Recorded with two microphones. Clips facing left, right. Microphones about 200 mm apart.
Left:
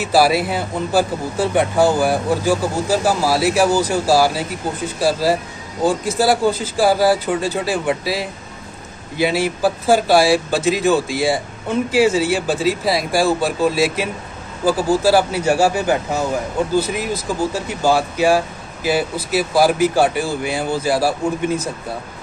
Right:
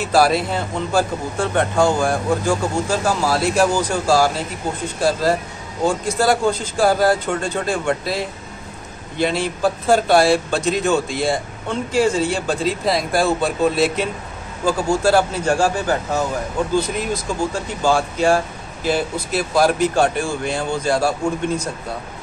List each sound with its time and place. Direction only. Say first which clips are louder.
0.0 s speech: left 1 dB; 5° left (ahead or behind)